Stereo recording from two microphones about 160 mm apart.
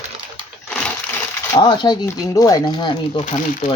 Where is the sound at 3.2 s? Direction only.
55° left (ahead or behind).